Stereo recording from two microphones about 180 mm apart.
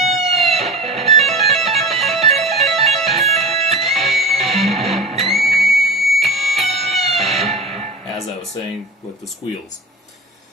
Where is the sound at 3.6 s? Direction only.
35° right (ahead or behind).